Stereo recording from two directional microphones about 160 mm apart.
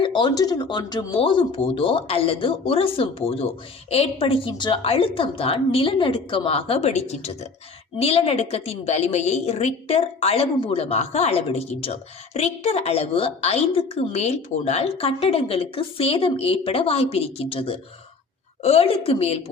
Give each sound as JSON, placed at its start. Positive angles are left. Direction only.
{"t": 0.0, "sound": "a woman's voice", "side_deg": 30}